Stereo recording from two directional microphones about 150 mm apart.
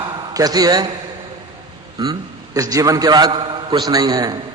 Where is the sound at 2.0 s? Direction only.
25° right (ahead or behind).